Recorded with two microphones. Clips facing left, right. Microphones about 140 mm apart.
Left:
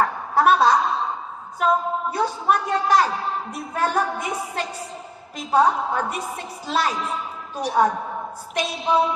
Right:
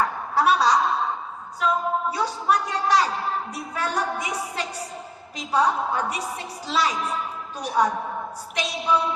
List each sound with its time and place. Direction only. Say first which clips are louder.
0.0 s a sound: left 3 dB; 50° left (ahead or behind)
3.5 s a woman's voice: left 4 dB; 55° left (ahead or behind)
5.5 s a woman's voice: left 3 dB; 50° left (ahead or behind)